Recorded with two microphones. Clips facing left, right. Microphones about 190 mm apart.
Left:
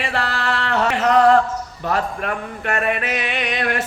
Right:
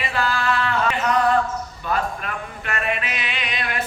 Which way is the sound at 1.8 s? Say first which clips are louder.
Left 3 dB; 80° left.